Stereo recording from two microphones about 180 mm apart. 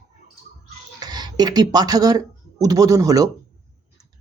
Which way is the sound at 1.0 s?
20° right (ahead or behind).